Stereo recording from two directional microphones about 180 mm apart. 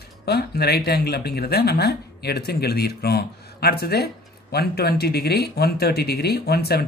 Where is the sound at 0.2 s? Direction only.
65° left (ahead or behind).